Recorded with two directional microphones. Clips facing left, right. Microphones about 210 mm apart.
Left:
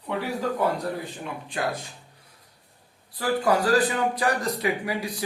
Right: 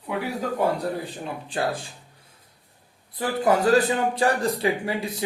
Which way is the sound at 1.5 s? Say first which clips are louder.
Right 2 dB; 30° right (ahead or behind).